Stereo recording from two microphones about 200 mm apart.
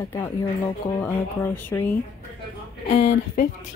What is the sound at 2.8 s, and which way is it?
Speech, 35° left (ahead or behind).